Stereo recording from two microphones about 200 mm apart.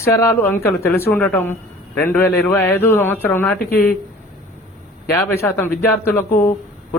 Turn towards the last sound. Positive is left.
turn(degrees=10)  # may be behind; listen again after turning